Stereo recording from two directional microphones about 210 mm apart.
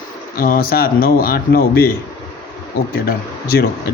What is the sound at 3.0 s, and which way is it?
Speech, 45° left (ahead or behind).